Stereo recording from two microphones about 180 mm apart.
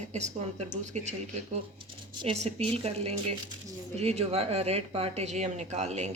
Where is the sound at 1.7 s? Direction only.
30° right (ahead or behind).